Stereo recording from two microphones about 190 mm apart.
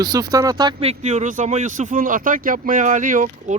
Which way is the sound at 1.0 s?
40° right (ahead or behind).